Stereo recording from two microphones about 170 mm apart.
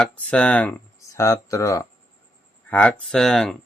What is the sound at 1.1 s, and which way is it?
Speech, 20° left (ahead or behind).